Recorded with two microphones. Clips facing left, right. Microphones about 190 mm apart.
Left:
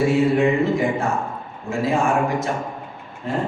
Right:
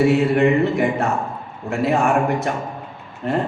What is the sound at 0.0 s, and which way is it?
A man's voice, 65° right (ahead or behind).